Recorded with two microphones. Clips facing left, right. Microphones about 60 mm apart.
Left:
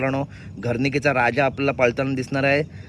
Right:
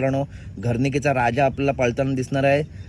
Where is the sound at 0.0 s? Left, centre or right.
Left.